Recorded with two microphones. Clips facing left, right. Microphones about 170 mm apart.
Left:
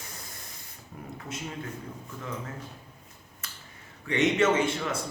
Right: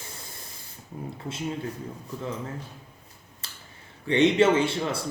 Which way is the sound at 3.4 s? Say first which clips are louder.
Left 1 dB; 30° right (ahead or behind).